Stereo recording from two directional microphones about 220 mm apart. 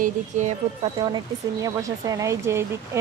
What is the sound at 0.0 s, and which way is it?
Speech, 35° right (ahead or behind).